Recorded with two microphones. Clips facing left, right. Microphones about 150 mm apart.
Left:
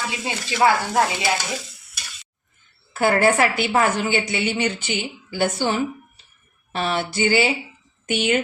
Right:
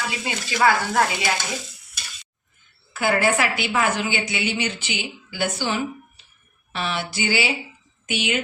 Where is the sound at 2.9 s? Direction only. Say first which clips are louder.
Left 3 dB; 45° left (ahead or behind).